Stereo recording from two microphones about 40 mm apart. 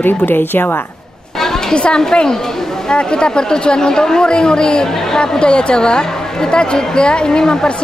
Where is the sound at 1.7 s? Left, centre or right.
Left.